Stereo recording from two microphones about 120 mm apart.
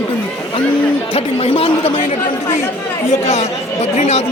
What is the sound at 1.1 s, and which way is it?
Speech, 60° left (ahead or behind).